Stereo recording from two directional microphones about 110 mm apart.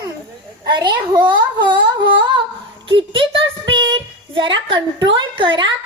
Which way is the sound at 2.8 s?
50° right (ahead or behind).